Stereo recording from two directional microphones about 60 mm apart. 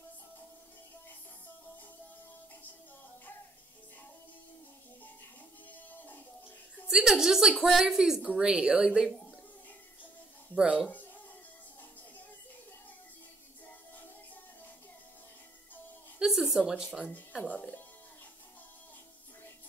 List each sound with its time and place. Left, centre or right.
5.7 s music: left
6.9 s a woman's voice: centre
10.5 s speech: centre
16.2 s a sound: centre
17.5 s speech: left